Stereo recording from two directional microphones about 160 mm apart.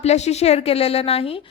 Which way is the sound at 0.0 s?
45° left (ahead or behind).